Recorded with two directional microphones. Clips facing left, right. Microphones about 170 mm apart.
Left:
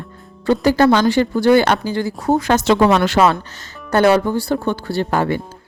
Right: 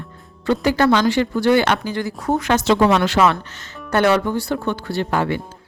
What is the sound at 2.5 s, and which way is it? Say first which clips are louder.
Speech: even; 55° left (ahead or behind).